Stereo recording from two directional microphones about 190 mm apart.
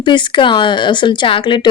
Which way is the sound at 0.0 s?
25° left (ahead or behind).